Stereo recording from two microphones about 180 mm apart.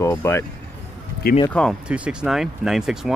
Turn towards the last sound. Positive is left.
turn(degrees=0)  # may be behind; listen again after turning